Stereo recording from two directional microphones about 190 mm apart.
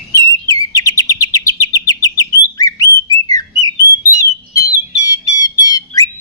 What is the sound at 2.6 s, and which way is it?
Bird, 20° left (ahead or behind).